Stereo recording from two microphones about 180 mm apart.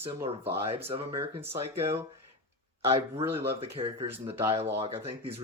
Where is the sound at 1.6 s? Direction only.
35° right (ahead or behind).